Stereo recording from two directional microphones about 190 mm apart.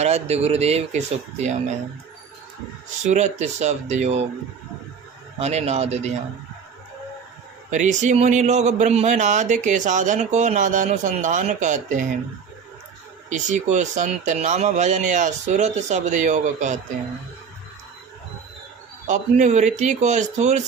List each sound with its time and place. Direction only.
0.0 s a man's voice: 35° right (ahead or behind)
3.0 s a man's voice: 40° right (ahead or behind)
5.4 s a man's voice: 35° right (ahead or behind)
7.7 s a man's voice: 40° right (ahead or behind)
13.3 s a man's voice: 40° right (ahead or behind)
19.0 s a man's voice: 40° right (ahead or behind)